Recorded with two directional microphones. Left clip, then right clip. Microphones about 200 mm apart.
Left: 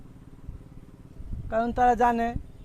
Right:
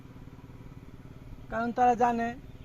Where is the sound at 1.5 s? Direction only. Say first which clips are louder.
Left 3 dB; 55° left (ahead or behind).